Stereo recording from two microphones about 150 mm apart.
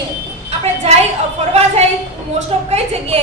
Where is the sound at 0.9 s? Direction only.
45° right (ahead or behind).